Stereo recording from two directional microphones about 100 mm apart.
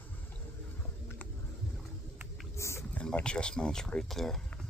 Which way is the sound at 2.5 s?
30° left (ahead or behind).